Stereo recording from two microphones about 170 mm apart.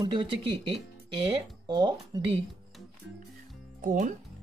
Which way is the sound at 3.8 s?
50° right (ahead or behind).